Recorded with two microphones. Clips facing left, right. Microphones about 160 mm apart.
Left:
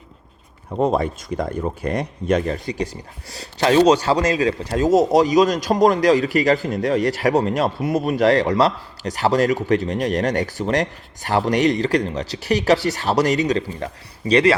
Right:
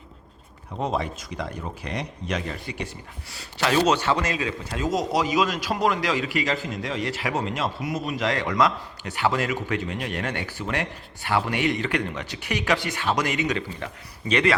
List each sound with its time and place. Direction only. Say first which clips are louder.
0.8 s a man's voice: left 8 dB; 45° left (ahead or behind)
7.6 s speech: left 8 dB; 55° left (ahead or behind)
8.2 s a man's voice: left 7 dB; 35° left (ahead or behind)